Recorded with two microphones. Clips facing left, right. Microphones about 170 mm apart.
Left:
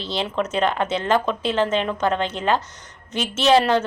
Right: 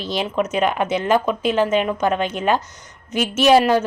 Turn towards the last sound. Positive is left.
turn(degrees=-10)  # may be behind; listen again after turning